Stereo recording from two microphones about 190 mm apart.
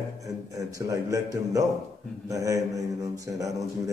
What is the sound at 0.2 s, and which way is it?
A man's voice, 20° right (ahead or behind).